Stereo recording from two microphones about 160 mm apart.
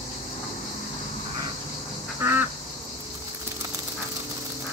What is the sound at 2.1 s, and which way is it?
Duck, 15° right (ahead or behind).